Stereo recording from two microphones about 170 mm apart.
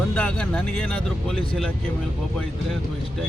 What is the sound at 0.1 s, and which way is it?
Speech, 5° left (ahead or behind).